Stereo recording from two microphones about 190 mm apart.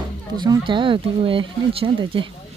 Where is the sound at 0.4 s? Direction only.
25° right (ahead or behind).